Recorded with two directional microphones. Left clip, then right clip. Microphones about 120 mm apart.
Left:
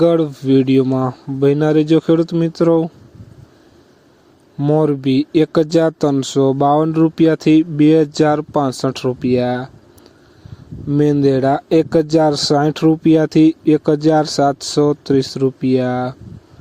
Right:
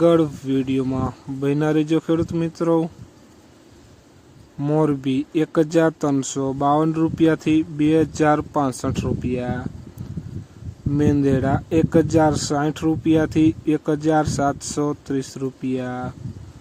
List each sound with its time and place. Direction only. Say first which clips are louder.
0.0 s speech: left 3 dB; 50° left (ahead or behind)
4.5 s speech: left 7 dB; 25° left (ahead or behind)
4.8 s speech: left 2 dB; 45° left (ahead or behind)
10.9 s speech: left 6 dB; 45° left (ahead or behind)